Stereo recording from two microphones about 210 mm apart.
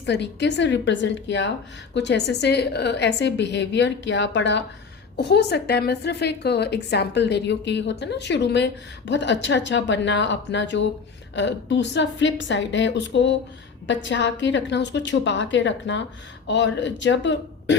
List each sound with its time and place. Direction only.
0.0 s a woman's voice: 55° left (ahead or behind)